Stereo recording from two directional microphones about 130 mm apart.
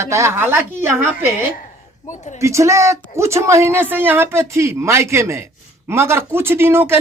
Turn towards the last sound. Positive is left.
turn(degrees=-20)  # may be behind; listen again after turning